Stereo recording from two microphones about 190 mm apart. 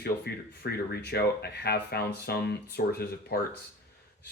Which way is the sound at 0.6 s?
60° left (ahead or behind).